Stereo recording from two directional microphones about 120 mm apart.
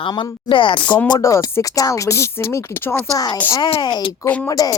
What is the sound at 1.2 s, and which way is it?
Speech, 25° left (ahead or behind).